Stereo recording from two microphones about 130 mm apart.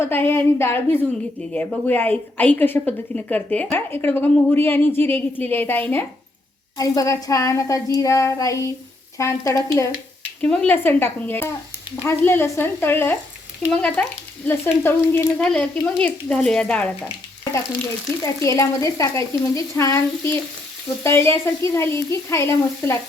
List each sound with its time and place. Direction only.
0.0 s a woman's voice: 20° left (ahead or behind)
6.7 s frying: 30° left (ahead or behind)
10.4 s a woman's voice: 5° left (ahead or behind)
15.4 s a woman's voice: 5° left (ahead or behind)
18.2 s frying: 20° left (ahead or behind)